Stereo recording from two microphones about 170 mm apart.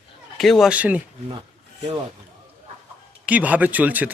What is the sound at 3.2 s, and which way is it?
Speech, 10° right (ahead or behind).